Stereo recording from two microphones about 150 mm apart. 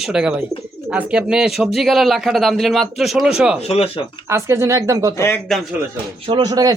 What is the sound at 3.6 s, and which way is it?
Speech, 40° left (ahead or behind).